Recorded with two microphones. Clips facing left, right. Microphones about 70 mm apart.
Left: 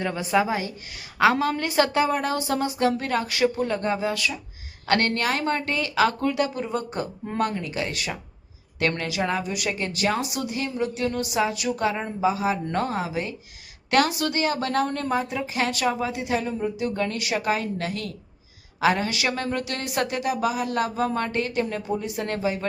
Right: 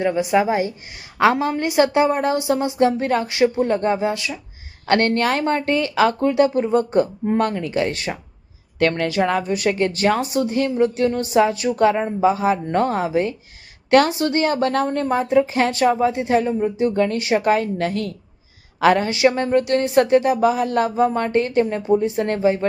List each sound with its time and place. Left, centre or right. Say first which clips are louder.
0.0 s a woman's voice: right 5 dB; centre
4.9 s a woman's voice: right 5 dB; right
14.8 s a woman's voice: right 6 dB; right
15.1 s a woman's voice: right 9 dB; right
19.0 s a woman's voice: right 9 dB; right